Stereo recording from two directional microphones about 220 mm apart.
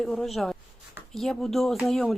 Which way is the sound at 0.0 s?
Centre (ahead or behind).